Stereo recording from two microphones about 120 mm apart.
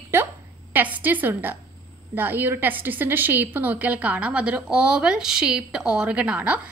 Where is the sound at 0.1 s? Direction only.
20° right (ahead or behind).